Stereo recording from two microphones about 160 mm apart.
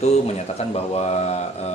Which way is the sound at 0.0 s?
40° left (ahead or behind).